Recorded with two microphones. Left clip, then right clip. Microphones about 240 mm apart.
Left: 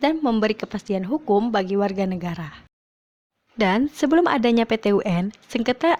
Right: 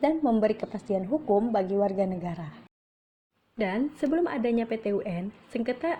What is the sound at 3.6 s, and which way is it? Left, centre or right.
Speech, left.